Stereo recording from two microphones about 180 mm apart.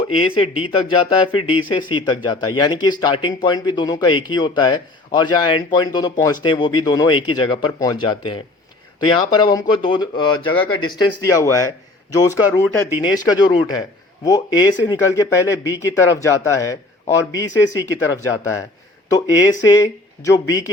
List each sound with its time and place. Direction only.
0.2 s speech: 30° left (ahead or behind)
19.6 s speech: 20° left (ahead or behind)